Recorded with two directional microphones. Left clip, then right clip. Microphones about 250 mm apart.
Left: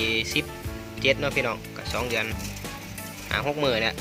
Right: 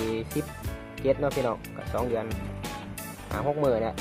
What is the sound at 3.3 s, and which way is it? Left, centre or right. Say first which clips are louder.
Speech: left 1 dB; left.